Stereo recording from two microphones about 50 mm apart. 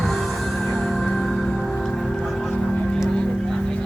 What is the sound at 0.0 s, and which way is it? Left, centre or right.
Music, centre.